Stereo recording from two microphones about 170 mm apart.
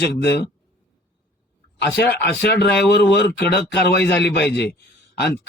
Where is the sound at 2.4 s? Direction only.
75° left (ahead or behind).